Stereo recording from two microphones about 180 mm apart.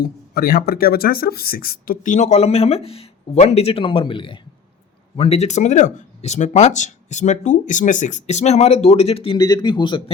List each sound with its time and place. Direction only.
0.0 s speech: 55° left (ahead or behind); by 10.0 s 25° left (ahead or behind)